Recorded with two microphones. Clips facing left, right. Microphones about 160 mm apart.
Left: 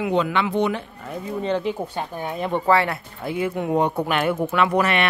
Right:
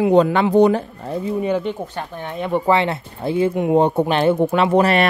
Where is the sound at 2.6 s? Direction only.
20° right (ahead or behind).